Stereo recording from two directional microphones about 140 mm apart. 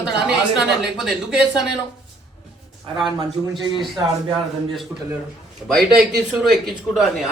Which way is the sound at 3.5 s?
35° right (ahead or behind).